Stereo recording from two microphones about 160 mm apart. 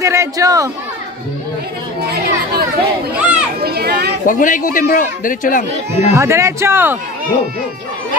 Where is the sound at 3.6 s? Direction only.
85° right.